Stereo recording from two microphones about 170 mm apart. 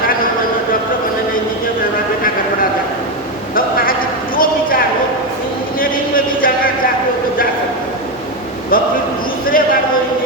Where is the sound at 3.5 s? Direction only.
55° left (ahead or behind).